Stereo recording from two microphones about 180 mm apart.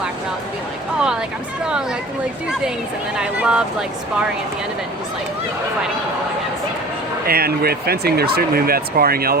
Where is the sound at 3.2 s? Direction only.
5° right (ahead or behind).